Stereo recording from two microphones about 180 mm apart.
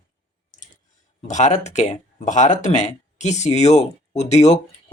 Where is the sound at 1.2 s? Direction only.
40° left (ahead or behind).